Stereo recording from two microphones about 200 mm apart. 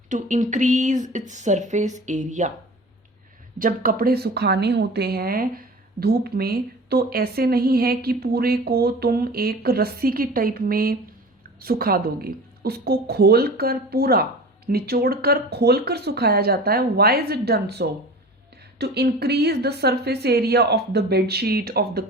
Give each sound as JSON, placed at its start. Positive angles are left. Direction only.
{"t": 0.1, "sound": "speech", "side_deg": -40}
{"t": 3.6, "sound": "a woman's voice", "side_deg": -45}